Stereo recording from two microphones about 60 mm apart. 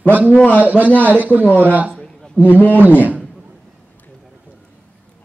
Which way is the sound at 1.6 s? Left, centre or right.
Right.